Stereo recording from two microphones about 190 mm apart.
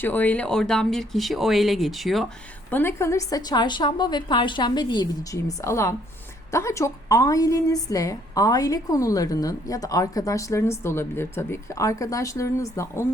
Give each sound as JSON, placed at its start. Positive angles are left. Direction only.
{"t": 0.0, "sound": "speech", "side_deg": 10}
{"t": 2.6, "sound": "a woman's voice", "side_deg": 10}